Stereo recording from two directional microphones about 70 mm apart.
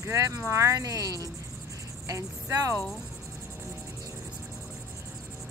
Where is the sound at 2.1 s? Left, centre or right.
Right.